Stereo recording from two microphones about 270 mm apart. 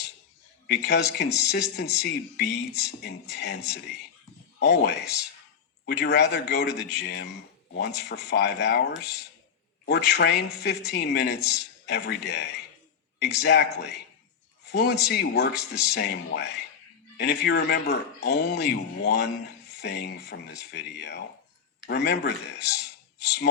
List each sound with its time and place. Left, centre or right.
0.7 s speech: left